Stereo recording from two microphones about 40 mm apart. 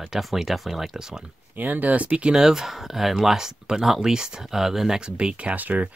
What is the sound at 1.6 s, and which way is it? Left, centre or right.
Speech, right.